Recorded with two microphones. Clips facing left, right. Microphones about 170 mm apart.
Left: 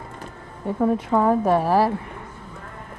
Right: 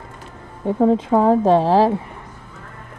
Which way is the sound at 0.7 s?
20° right (ahead or behind).